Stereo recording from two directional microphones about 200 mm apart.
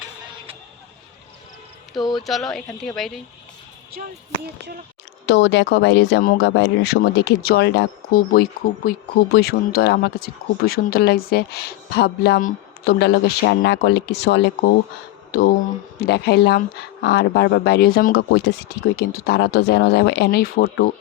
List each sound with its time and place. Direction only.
1.9 s speech: centre (ahead or behind)
3.9 s speech: 55° right (ahead or behind)
5.2 s speech: 60° left (ahead or behind)
15.3 s speech: 50° left (ahead or behind)